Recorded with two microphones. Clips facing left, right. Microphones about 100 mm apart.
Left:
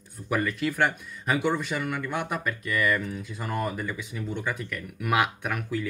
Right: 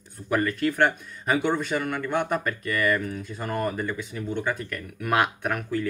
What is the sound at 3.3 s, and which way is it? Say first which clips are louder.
Speech: right 2 dB; 45° right (ahead or behind).